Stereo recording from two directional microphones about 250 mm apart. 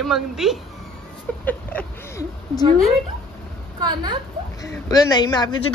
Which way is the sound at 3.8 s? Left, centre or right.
Centre.